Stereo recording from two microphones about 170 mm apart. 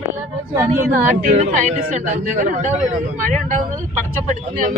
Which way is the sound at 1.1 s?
45° right (ahead or behind).